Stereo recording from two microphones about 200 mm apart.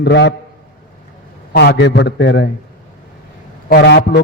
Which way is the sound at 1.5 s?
55° left (ahead or behind).